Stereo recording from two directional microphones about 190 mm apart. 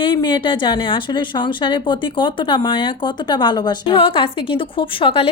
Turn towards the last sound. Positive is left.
turn(degrees=30)  # may be behind; listen again after turning